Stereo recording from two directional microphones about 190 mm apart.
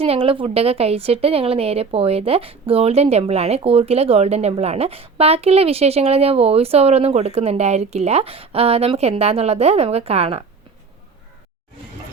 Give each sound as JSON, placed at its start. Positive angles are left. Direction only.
{"t": 0.0, "sound": "a woman's voice", "side_deg": -30}